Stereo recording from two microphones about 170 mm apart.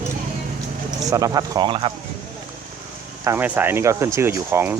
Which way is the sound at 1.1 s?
20° right (ahead or behind).